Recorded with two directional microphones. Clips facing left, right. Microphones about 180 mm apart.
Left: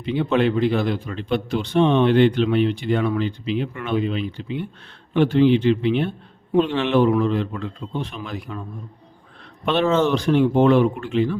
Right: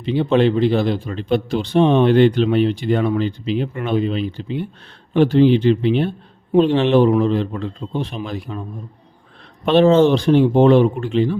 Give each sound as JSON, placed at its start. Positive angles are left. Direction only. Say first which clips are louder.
{"t": 0.0, "sound": "a man's voice", "louder": "right 4 dB", "side_deg": -30}
{"t": 9.6, "sound": "a man's voice", "louder": "right 6 dB", "side_deg": -35}